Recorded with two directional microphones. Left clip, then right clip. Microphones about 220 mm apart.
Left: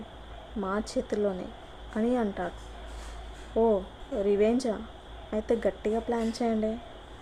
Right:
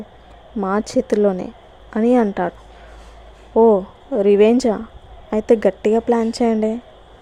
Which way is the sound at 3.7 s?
35° right (ahead or behind).